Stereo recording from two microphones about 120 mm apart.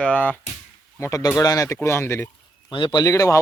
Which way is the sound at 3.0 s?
25° left (ahead or behind).